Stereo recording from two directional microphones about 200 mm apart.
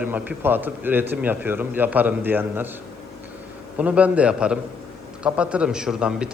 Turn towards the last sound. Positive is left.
turn(degrees=-5)  # may be behind; listen again after turning